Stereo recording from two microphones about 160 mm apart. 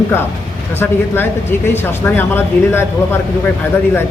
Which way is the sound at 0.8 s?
15° left (ahead or behind).